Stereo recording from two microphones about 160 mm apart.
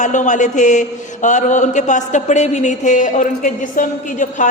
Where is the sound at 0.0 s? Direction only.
50° left (ahead or behind).